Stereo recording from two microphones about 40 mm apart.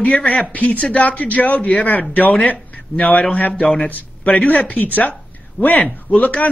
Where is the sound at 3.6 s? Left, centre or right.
Left.